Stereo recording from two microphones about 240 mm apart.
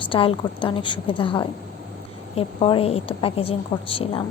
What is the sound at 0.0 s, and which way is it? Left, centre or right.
A woman's voice, left.